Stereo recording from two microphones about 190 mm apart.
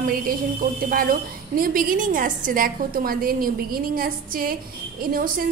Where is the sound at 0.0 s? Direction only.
50° right (ahead or behind).